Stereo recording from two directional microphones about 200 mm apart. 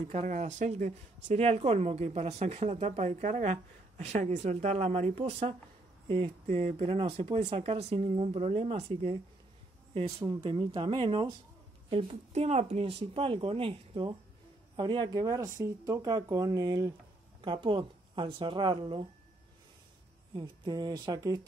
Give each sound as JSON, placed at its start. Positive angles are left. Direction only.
{"t": 0.0, "sound": "speech", "side_deg": -35}
{"t": 20.3, "sound": "speech", "side_deg": -20}